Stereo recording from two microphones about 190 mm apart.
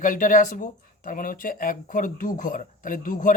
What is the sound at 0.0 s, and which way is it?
Speech, 45° left (ahead or behind).